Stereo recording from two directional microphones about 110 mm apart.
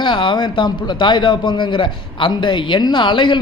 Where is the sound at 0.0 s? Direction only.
50° left (ahead or behind).